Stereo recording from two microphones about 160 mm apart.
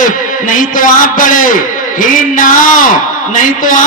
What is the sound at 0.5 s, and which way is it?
A man's voice, 55° left (ahead or behind).